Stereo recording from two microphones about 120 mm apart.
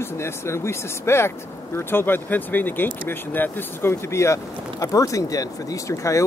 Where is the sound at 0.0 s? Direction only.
20° left (ahead or behind).